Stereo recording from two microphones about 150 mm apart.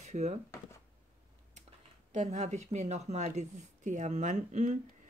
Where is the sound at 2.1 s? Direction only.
45° right (ahead or behind).